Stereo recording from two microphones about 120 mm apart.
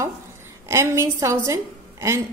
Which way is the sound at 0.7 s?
20° right (ahead or behind).